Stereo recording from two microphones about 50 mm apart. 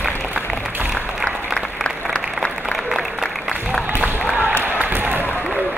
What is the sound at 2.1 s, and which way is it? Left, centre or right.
Applause, left.